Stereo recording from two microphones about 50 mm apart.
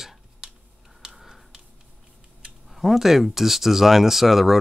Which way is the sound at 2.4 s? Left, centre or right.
Centre.